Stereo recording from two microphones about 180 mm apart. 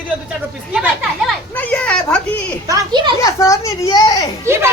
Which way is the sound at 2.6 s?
20° right (ahead or behind).